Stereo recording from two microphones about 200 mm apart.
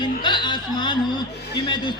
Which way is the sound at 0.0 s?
20° left (ahead or behind).